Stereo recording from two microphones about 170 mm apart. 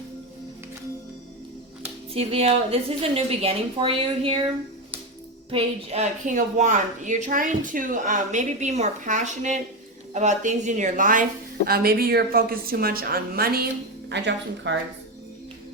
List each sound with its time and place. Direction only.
2.1 s a woman's voice: 35° right (ahead or behind)
5.5 s a woman's voice: 35° right (ahead or behind); by 13.7 s 65° right (ahead or behind)
14.1 s speech: 90° right